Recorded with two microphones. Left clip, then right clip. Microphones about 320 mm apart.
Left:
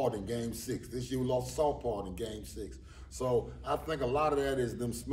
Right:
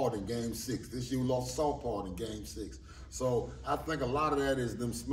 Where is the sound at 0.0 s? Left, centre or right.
Centre.